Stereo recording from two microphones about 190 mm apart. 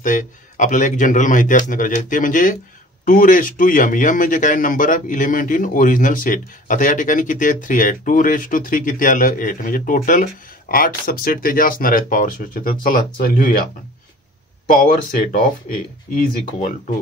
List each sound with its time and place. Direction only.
0.0 s speech: 40° left (ahead or behind)
14.7 s speech: 45° left (ahead or behind)